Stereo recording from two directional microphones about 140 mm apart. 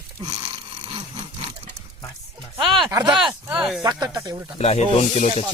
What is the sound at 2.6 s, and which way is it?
Speech, 35° right (ahead or behind).